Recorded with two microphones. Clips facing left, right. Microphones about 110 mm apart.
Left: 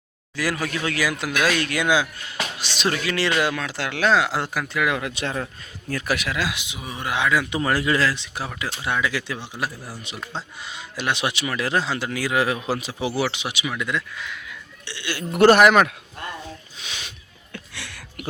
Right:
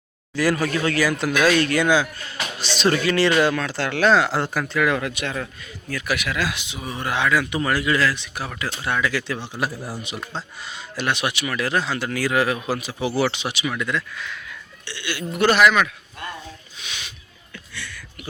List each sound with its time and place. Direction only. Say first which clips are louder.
0.3 s speech: right 5 dB; 5° left (ahead or behind)
5.1 s speech: left 1 dB; 30° left (ahead or behind)
6.3 s speech: right 1 dB; 15° left (ahead or behind)
7.5 s speech: even; 30° left (ahead or behind)
8.4 s speech: right 1 dB; 15° left (ahead or behind)
10.0 s speech: right 3 dB; 10° right (ahead or behind)
10.3 s speech: even; 15° left (ahead or behind)
13.2 s speech: right 3 dB; 10° left (ahead or behind)
14.8 s speech: even; 30° left (ahead or behind)
15.4 s speech: left 3 dB; 50° left (ahead or behind)
16.8 s a sound: right 1 dB; 35° left (ahead or behind)
17.5 s a sound: even; 80° left